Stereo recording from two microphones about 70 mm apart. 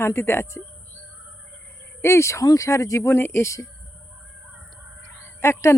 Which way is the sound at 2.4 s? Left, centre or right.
Left.